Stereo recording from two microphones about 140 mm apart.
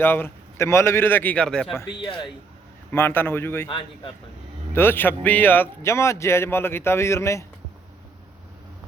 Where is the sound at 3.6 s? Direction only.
35° left (ahead or behind).